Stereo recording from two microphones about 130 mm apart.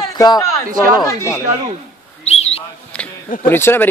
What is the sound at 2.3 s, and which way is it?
Bird, 55° left (ahead or behind).